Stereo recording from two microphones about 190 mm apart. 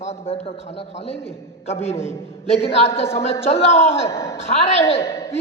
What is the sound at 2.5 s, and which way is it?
A man's voice, 35° left (ahead or behind).